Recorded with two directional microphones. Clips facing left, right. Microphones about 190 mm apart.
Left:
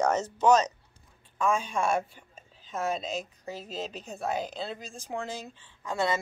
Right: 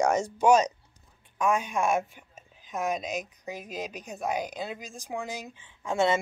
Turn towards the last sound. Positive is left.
turn(degrees=-25)  # may be behind; listen again after turning